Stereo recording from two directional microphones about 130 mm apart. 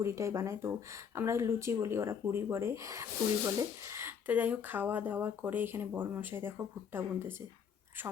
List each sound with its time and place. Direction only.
0.0 s speech: 20° right (ahead or behind)